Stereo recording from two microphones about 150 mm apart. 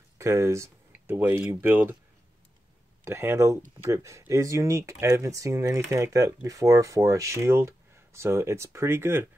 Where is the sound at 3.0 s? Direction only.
15° right (ahead or behind).